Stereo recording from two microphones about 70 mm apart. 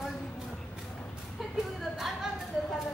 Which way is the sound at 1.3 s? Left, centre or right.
Centre.